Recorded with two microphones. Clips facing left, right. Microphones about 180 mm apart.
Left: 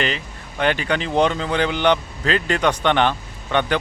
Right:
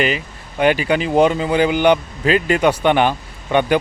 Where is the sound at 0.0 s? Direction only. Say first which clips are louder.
Right 5 dB; 10° right (ahead or behind).